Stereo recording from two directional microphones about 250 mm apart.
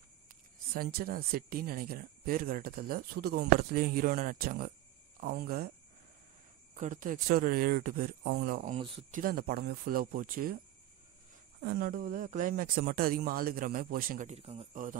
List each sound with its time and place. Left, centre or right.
0.7 s speech: right
6.7 s speech: right
8.7 s speech: right
9.1 s speech: right
11.6 s speech: right